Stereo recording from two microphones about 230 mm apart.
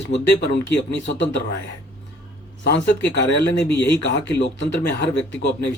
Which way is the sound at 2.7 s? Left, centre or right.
Left.